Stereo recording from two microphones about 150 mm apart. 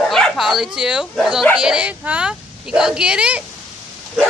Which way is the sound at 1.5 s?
5° right (ahead or behind).